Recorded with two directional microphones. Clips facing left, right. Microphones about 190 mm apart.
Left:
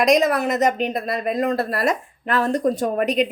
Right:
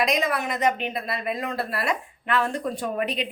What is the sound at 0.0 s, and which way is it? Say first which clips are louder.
Speech: left 7 dB; 45° left (ahead or behind).